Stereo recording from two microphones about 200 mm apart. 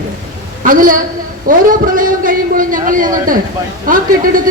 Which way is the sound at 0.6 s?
40° right (ahead or behind).